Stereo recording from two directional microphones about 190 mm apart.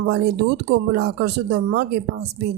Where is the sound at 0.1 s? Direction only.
60° right (ahead or behind).